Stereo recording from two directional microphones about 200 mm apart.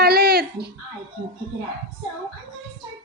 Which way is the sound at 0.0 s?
50° right (ahead or behind).